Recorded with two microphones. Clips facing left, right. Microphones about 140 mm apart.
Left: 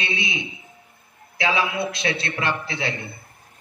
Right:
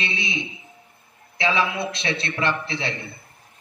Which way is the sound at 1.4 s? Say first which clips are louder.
Even; 30° right (ahead or behind).